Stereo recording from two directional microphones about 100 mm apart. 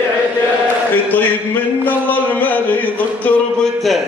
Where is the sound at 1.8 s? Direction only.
15° left (ahead or behind).